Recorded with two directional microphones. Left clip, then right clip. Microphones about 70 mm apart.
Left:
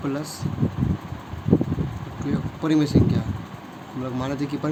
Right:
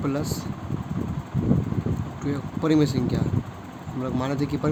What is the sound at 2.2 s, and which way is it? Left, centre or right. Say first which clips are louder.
Speech: even; right.